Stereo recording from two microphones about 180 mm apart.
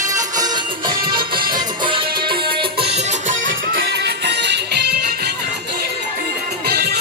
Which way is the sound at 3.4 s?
80° right.